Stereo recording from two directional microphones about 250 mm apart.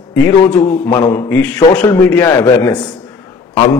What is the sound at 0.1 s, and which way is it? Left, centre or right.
A man's voice, centre.